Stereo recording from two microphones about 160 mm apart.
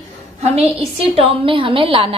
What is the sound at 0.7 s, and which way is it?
A woman's voice, 35° right (ahead or behind).